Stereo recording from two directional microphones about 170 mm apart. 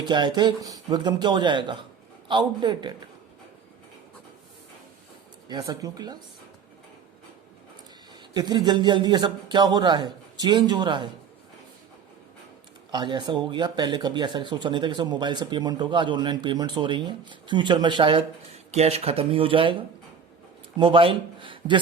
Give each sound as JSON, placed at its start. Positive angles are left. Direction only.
{"t": 0.0, "sound": "speech", "side_deg": -25}
{"t": 5.5, "sound": "speech", "side_deg": -25}
{"t": 8.3, "sound": "speech", "side_deg": -25}
{"t": 12.9, "sound": "speech", "side_deg": -25}
{"t": 20.7, "sound": "speech", "side_deg": -30}